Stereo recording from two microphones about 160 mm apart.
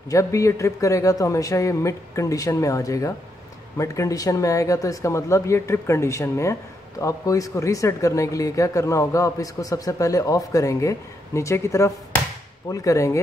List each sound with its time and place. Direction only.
0.1 s speech: 20° left (ahead or behind)